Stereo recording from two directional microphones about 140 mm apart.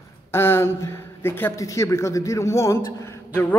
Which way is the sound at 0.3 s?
15° left (ahead or behind).